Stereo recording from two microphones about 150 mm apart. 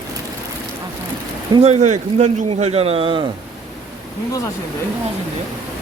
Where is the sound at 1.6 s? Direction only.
50° right (ahead or behind).